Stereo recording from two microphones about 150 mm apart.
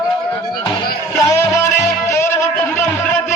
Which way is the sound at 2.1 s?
15° left (ahead or behind).